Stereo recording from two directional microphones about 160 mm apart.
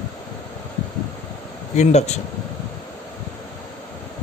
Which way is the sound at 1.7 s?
45° left (ahead or behind).